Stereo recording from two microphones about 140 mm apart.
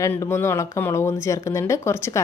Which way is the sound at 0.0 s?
20° left (ahead or behind).